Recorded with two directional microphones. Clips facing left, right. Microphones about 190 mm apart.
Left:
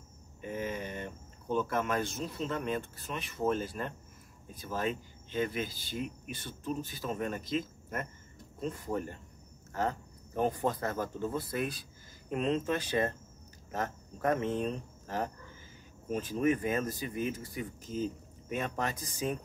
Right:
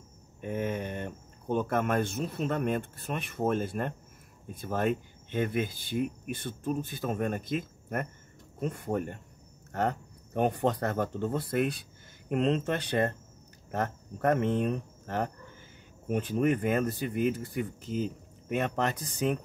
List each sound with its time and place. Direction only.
0.4 s speech: 55° right (ahead or behind)